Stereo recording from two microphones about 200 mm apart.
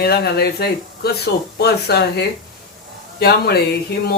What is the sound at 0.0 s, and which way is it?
Speech, 50° left (ahead or behind).